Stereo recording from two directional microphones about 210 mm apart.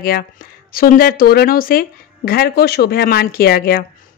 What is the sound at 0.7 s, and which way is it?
Speech, 45° left (ahead or behind).